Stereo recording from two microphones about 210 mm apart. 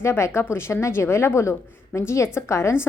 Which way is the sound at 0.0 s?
10° left (ahead or behind).